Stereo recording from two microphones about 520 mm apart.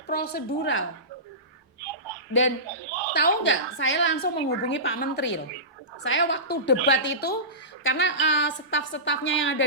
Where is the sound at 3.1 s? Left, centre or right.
Centre.